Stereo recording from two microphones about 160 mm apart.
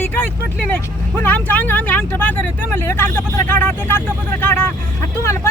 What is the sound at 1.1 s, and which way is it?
Speech, 10° left (ahead or behind).